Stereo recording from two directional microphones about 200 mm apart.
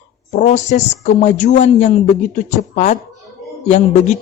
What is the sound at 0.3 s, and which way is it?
Speech, 40° left (ahead or behind).